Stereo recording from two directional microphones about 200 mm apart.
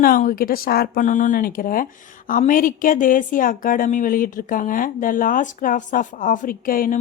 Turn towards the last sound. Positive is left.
turn(degrees=45)  # may be behind; listen again after turning